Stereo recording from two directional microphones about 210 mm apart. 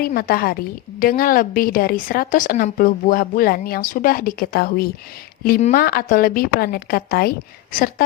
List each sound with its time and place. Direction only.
0.0 s a woman's voice: 45° left (ahead or behind)